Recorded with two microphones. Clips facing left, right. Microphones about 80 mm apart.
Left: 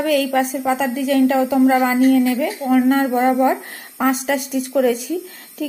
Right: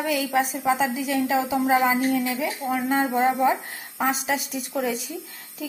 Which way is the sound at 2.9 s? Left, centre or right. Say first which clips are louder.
Left 6 dB; centre.